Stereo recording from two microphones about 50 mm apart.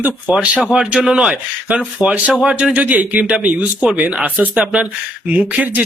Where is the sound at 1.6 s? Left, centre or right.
Right.